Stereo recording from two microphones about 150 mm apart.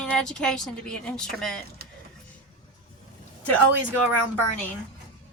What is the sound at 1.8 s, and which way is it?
Vehicle, 90° right.